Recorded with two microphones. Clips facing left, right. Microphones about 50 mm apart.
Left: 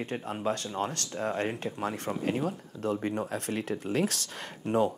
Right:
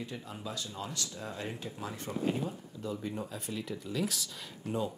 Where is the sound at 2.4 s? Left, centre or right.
Left.